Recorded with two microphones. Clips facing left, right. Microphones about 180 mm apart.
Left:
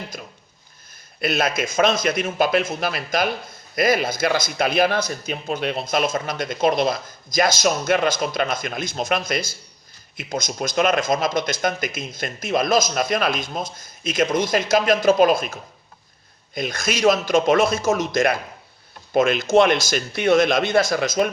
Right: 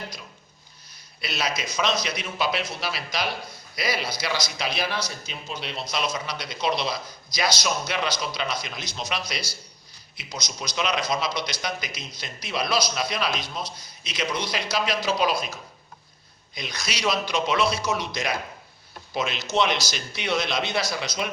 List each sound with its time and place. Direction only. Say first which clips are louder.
1.2 s speech: left 8 dB; 50° left (ahead or behind)
16.6 s speech: left 10 dB; 50° left (ahead or behind)